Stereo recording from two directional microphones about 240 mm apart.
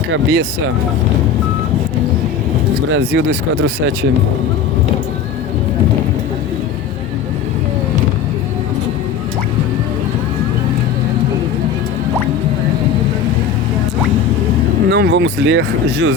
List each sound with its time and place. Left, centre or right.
0.1 s speech: right
2.9 s speech: right
14.8 s speech: right